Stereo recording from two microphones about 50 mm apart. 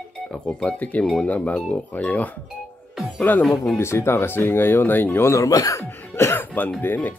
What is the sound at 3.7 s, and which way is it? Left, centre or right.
Speech, left.